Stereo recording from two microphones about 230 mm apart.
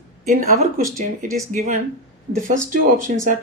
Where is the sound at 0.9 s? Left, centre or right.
Right.